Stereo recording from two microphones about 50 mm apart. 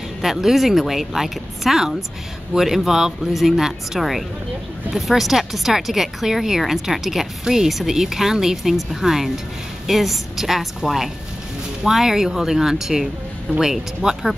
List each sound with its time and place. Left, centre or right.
0.2 s speech: centre